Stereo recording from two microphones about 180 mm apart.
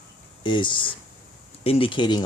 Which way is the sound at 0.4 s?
25° left (ahead or behind).